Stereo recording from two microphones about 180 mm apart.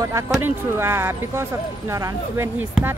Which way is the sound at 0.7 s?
15° right (ahead or behind).